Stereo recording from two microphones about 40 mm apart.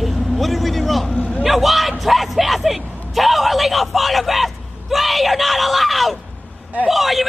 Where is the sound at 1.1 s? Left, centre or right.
Left.